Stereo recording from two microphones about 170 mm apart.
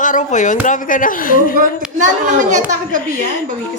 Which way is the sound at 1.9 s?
45° right (ahead or behind).